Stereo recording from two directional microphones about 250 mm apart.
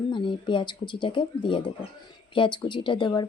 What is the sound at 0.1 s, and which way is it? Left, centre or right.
Speech, centre.